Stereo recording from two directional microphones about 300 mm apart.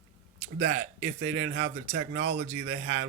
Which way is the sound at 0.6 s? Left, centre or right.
Right.